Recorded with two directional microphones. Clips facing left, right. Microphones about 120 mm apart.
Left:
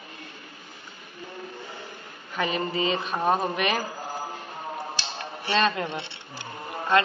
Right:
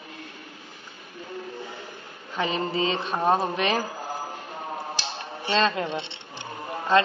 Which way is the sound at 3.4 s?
25° right (ahead or behind).